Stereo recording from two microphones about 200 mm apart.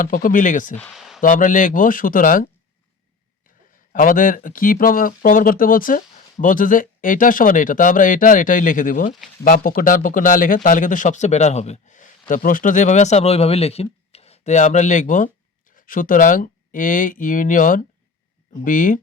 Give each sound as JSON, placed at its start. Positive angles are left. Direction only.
{"t": 0.0, "sound": "speech", "side_deg": 45}
{"t": 0.8, "sound": "a sound", "side_deg": 0}
{"t": 1.2, "sound": "speech", "side_deg": 40}
{"t": 3.9, "sound": "speech", "side_deg": 45}